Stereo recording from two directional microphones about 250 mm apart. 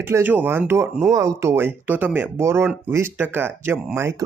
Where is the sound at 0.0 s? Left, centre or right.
Centre.